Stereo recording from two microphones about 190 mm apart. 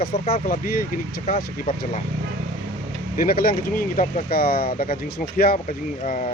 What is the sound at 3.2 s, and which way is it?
Speech, 50° left (ahead or behind).